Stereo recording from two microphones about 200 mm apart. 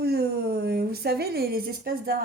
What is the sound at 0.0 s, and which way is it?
A woman's voice, 50° right (ahead or behind).